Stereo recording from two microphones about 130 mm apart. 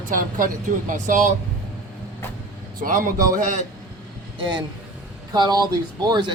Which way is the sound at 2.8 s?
90° right.